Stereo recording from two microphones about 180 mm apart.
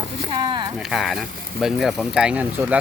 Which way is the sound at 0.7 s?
Centre (ahead or behind).